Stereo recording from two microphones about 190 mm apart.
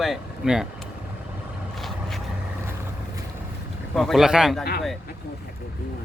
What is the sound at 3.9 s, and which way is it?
Speech, centre (ahead or behind).